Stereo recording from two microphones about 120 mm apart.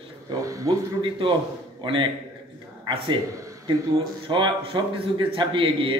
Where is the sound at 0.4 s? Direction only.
30° right (ahead or behind).